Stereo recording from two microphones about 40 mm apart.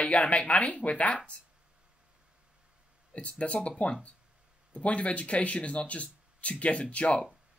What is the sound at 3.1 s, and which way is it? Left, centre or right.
Speech, left.